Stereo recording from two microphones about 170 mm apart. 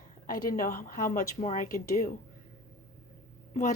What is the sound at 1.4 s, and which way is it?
Speech, 45° left (ahead or behind).